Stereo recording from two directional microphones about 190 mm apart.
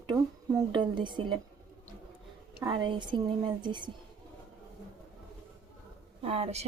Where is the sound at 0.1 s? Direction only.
25° right (ahead or behind).